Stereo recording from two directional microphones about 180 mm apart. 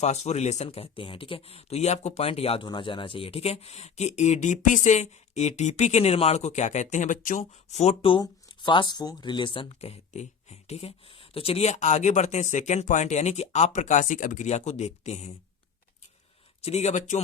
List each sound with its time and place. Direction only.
0.0 s speech: 40° left (ahead or behind)
16.6 s speech: 40° left (ahead or behind)